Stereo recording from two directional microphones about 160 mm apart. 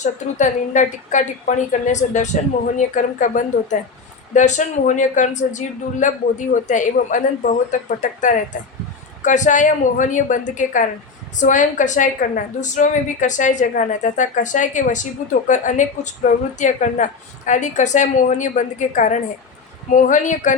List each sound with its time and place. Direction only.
0.0 s a woman's voice: 50° left (ahead or behind)